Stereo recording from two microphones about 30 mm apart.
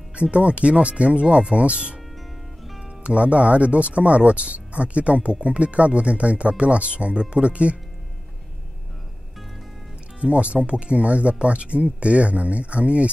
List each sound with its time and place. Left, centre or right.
0.1 s speech: right
3.0 s speech: right
10.2 s speech: right